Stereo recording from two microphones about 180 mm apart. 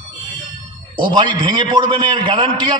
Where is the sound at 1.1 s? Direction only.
25° right (ahead or behind).